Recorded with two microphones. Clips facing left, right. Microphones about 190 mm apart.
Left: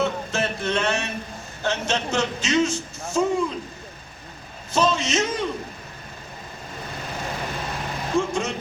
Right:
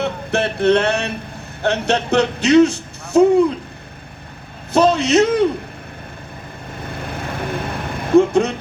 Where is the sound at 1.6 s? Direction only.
65° right (ahead or behind).